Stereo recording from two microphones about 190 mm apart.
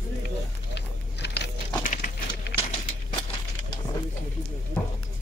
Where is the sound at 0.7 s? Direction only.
65° left (ahead or behind).